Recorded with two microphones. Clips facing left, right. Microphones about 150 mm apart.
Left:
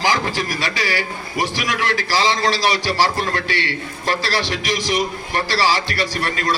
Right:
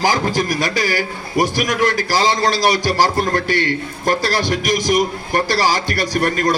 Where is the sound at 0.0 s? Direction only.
45° right (ahead or behind).